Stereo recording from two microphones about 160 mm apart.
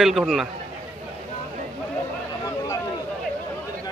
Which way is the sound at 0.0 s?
Centre (ahead or behind).